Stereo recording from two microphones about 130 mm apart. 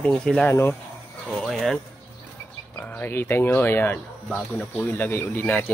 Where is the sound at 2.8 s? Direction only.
15° left (ahead or behind).